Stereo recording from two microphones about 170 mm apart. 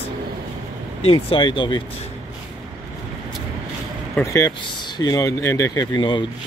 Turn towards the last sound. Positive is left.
turn(degrees=25)  # may be behind; listen again after turning